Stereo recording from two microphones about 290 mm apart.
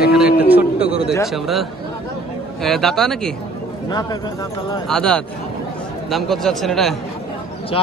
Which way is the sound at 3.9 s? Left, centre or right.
Centre.